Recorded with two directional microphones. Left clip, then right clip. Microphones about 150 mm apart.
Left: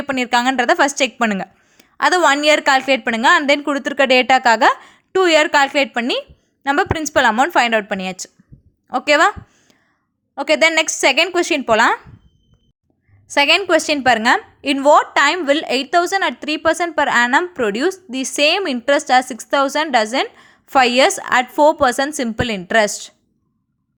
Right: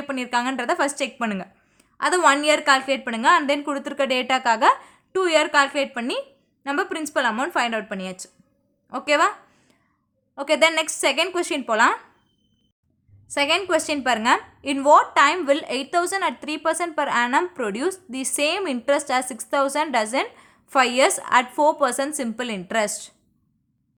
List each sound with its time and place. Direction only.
0.0 s speech: 35° left (ahead or behind)
10.3 s a woman's voice: 25° left (ahead or behind)
13.2 s a woman's voice: 35° left (ahead or behind)